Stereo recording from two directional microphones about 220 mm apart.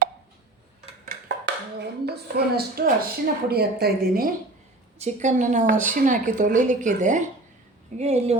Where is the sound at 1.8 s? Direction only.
50° right (ahead or behind).